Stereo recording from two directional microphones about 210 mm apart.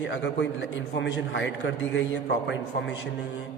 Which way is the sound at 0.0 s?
55° left (ahead or behind).